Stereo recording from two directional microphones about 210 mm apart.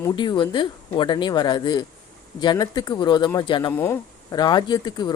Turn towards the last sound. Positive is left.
turn(degrees=20)  # may be behind; listen again after turning